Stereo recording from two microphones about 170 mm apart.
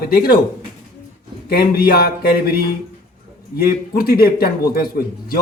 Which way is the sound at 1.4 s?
65° left (ahead or behind).